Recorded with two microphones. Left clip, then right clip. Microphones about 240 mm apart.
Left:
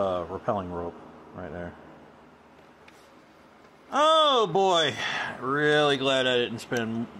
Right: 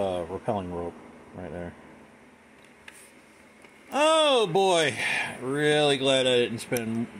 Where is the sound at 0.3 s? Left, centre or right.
Centre.